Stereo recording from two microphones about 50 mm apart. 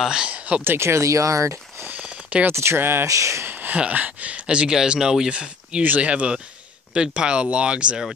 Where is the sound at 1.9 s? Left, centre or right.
Right.